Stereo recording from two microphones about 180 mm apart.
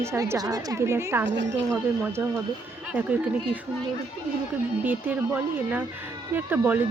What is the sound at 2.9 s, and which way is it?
Speech, 10° right (ahead or behind).